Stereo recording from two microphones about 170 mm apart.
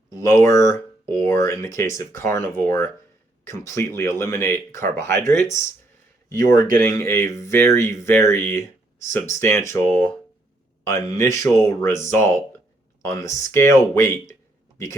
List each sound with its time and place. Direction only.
0.1 s speech: 15° left (ahead or behind)